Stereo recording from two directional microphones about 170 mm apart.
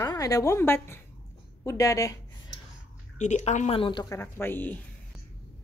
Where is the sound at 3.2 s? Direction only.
45° left (ahead or behind).